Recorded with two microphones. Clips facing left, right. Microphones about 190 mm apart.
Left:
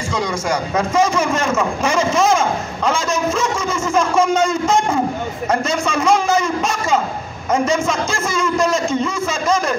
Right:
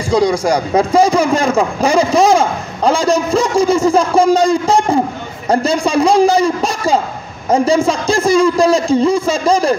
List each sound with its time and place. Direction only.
0.1 s a man's voice: 35° right (ahead or behind)